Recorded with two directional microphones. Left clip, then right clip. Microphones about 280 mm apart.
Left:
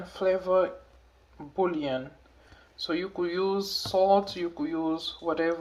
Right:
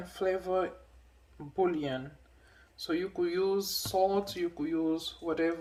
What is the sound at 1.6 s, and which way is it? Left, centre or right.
Speech, right.